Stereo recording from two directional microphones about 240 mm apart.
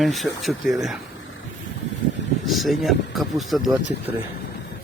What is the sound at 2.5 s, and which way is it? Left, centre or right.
Speech, centre.